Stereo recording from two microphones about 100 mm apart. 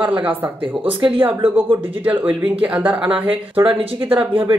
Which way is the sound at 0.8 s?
60° right (ahead or behind).